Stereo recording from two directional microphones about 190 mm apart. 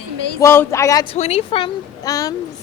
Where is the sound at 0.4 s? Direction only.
15° left (ahead or behind).